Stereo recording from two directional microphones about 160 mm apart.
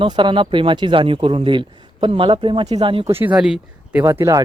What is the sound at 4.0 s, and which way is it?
Speech, 20° right (ahead or behind).